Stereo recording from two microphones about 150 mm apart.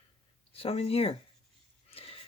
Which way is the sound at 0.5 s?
40° left (ahead or behind).